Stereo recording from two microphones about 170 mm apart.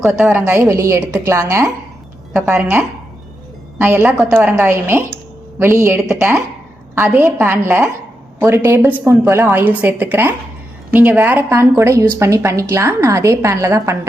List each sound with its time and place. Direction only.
0.0 s a woman's voice: 5° right (ahead or behind)
2.3 s a woman's voice: 5° right (ahead or behind)
4.4 s a woman's voice: 15° right (ahead or behind)
6.0 s a woman's voice: 5° right (ahead or behind)